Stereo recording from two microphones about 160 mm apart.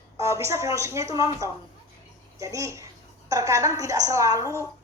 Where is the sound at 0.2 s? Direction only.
15° right (ahead or behind).